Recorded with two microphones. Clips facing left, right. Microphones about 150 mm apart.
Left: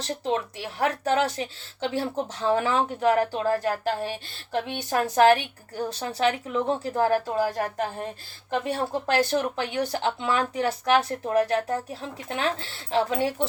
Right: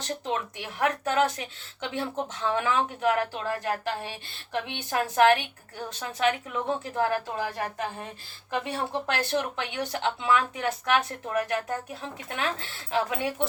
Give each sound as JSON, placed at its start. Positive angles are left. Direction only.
{"t": 0.0, "sound": "speech", "side_deg": 35}